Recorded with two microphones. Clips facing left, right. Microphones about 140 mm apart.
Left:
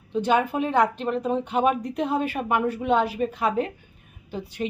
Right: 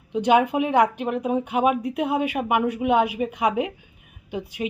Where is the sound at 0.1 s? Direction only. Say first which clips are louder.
Right 3 dB; 15° right (ahead or behind).